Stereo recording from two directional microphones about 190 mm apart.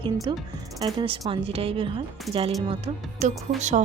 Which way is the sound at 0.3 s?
25° right (ahead or behind).